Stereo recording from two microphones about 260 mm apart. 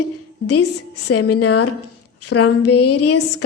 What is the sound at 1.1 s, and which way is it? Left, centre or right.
A woman's voice, left.